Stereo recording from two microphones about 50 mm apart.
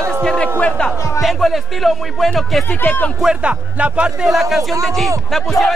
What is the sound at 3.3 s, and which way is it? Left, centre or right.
Speech, right.